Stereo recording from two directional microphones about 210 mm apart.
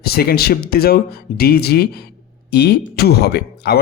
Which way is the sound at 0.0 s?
45° left (ahead or behind).